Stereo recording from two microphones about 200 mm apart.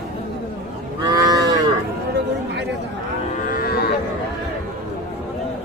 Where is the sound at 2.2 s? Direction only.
60° right (ahead or behind).